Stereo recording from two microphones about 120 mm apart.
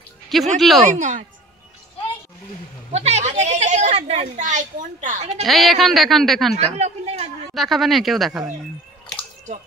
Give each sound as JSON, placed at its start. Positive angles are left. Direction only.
{"t": 0.6, "sound": "speech", "side_deg": 0}
{"t": 0.8, "sound": "a woman's voice", "side_deg": -90}
{"t": 2.9, "sound": "a sound", "side_deg": -65}
{"t": 4.4, "sound": "a woman's voice", "side_deg": -90}
{"t": 5.4, "sound": "speech", "side_deg": 0}
{"t": 6.6, "sound": "a sound", "side_deg": -65}
{"t": 7.5, "sound": "speech", "side_deg": 0}